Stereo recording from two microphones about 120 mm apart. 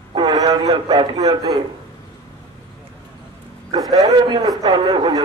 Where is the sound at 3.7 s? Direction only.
30° right (ahead or behind).